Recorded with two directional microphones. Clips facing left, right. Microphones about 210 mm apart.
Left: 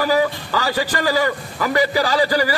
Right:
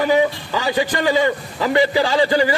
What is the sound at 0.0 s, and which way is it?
A man's voice, 20° right (ahead or behind).